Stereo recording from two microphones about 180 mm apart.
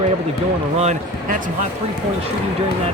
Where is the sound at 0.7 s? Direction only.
40° right (ahead or behind).